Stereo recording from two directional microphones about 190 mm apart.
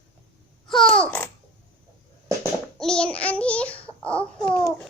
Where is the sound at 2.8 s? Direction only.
5° left (ahead or behind).